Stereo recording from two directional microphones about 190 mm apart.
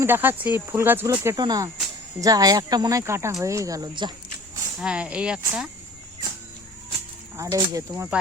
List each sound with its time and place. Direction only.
0.0 s speech: 10° right (ahead or behind)
4.8 s speech: 5° right (ahead or behind)
7.3 s speech: 15° right (ahead or behind)